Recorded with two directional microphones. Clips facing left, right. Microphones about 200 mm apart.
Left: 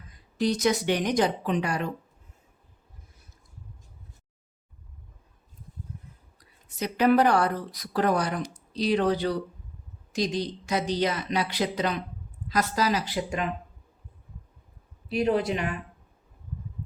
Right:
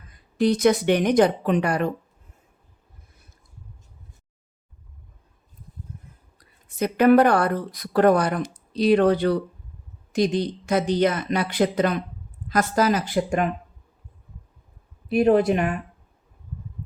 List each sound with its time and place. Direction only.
0.1 s speech: 55° right (ahead or behind)
6.7 s speech: 55° right (ahead or behind)
15.1 s speech: 50° right (ahead or behind)